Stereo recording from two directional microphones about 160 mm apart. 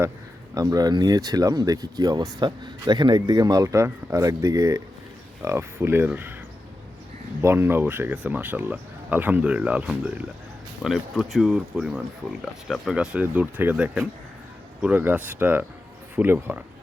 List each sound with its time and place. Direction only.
0.5 s speech: 20° right (ahead or behind)
7.4 s speech: 15° right (ahead or behind)